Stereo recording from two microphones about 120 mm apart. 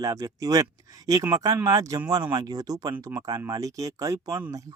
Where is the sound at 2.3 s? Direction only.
30° right (ahead or behind).